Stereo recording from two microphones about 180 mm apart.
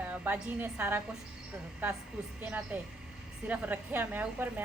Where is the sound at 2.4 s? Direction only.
10° right (ahead or behind).